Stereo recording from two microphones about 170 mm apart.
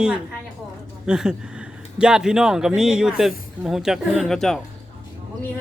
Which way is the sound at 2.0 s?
5° right (ahead or behind).